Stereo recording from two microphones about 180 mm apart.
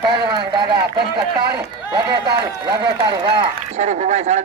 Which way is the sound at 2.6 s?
25° right (ahead or behind).